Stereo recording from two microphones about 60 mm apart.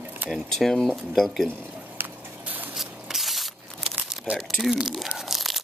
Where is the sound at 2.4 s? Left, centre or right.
Right.